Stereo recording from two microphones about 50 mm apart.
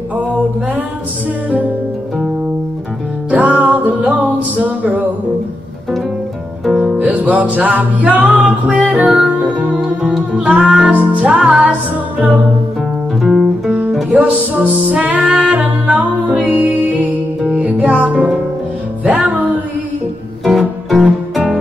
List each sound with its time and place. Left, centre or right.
3.3 s music: right
7.0 s music: right
14.1 s music: right
20.4 s music: centre